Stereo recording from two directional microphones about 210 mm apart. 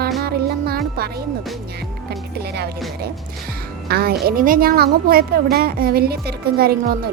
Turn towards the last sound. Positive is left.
turn(degrees=-45)  # may be behind; listen again after turning